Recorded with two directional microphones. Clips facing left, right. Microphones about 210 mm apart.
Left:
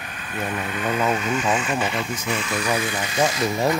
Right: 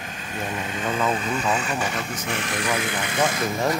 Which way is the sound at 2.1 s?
55° right (ahead or behind).